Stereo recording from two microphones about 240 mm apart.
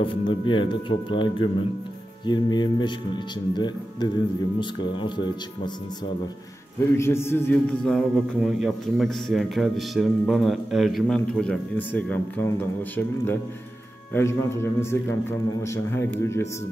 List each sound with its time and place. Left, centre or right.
0.0 s speech: left
7.0 s a man's voice: centre
14.1 s a man's voice: centre